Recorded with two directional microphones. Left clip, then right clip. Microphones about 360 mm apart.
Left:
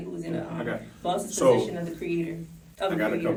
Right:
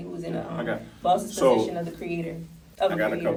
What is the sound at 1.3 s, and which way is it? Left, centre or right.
Speech, centre.